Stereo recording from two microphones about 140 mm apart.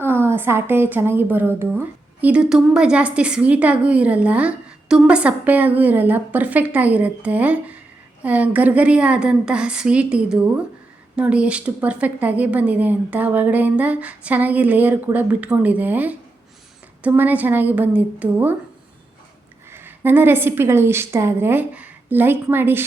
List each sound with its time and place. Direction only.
0.0 s a woman's voice: 15° right (ahead or behind)
19.7 s a woman's voice: 15° right (ahead or behind)